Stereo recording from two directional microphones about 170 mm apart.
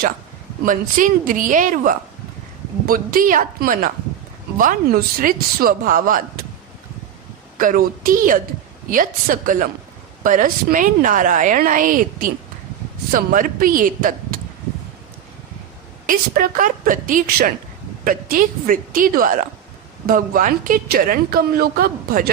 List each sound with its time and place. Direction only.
0.6 s a woman's voice: 50° right (ahead or behind)
7.6 s a woman's voice: 55° right (ahead or behind)
16.0 s a woman's voice: 55° right (ahead or behind)